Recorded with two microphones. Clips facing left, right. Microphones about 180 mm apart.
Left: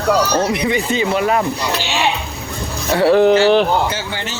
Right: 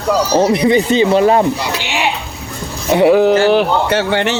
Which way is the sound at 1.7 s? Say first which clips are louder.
Even; 15° right (ahead or behind).